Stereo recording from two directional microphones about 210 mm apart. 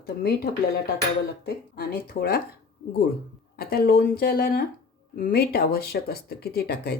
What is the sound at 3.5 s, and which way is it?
Speech, 45° left (ahead or behind).